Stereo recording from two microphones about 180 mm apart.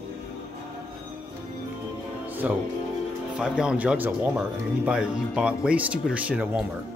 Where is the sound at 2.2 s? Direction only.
10° right (ahead or behind).